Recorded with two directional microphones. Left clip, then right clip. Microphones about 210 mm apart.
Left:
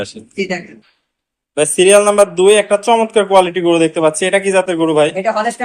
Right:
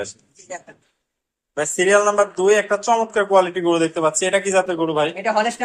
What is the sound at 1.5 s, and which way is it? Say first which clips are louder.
Speech: left 7 dB; 40° left (ahead or behind).